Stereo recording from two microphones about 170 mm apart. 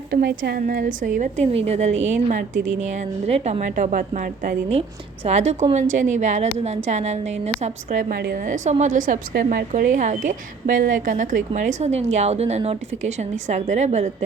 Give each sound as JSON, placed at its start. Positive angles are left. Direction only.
{"t": 0.1, "sound": "a woman's voice", "side_deg": -70}
{"t": 8.1, "sound": "a woman's voice", "side_deg": -65}